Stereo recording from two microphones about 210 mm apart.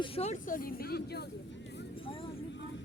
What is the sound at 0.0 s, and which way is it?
Speech, 30° left (ahead or behind).